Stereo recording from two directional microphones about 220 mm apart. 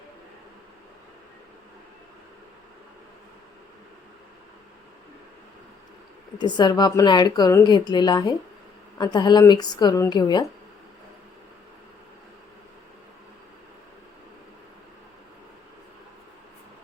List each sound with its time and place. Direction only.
6.4 s a woman's voice: 20° left (ahead or behind)